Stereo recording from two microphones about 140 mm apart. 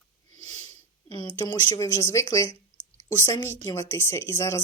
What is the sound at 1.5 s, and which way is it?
Speech, 25° left (ahead or behind).